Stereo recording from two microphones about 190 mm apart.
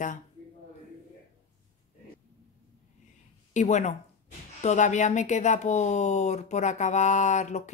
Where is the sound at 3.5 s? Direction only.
40° left (ahead or behind).